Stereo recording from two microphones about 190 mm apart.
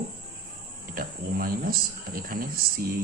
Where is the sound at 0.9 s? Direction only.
50° right (ahead or behind).